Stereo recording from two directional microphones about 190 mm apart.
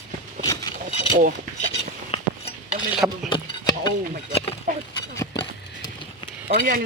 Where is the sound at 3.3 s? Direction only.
20° left (ahead or behind).